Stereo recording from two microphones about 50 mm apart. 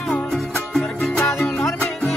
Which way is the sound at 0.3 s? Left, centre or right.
Centre.